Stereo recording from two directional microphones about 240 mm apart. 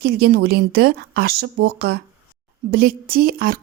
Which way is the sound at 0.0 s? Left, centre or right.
Right.